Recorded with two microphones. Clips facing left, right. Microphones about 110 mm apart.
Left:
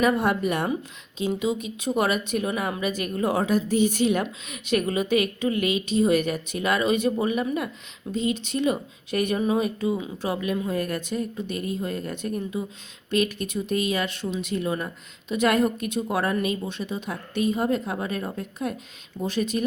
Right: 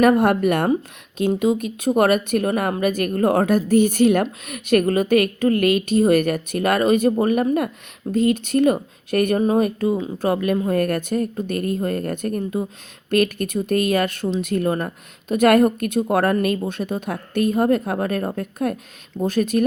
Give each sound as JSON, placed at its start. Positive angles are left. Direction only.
{"t": 0.0, "sound": "speech", "side_deg": -55}